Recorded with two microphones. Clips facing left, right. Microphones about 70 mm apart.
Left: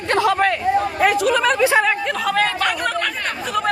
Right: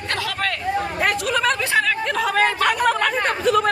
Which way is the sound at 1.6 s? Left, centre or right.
Centre.